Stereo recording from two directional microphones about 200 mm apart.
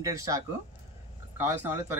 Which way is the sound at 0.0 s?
15° right (ahead or behind).